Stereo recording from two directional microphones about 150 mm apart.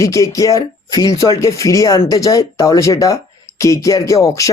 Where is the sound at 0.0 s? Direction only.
20° left (ahead or behind).